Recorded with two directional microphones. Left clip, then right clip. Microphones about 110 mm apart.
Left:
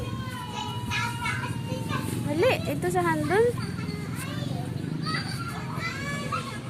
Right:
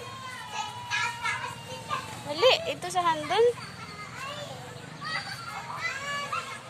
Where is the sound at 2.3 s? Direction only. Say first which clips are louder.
Right 2 dB; 25° right (ahead or behind).